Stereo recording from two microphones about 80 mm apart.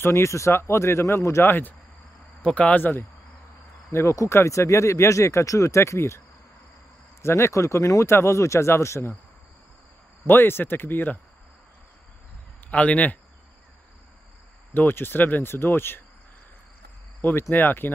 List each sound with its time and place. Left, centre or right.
0.0 s speech: left
2.4 s speech: centre
3.9 s speech: left
10.2 s speech: left
12.7 s speech: centre
14.7 s speech: left
17.2 s speech: left